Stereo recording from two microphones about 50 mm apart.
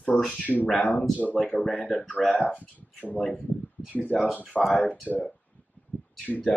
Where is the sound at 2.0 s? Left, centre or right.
Centre.